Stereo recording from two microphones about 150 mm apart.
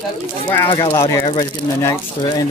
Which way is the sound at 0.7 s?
25° left (ahead or behind).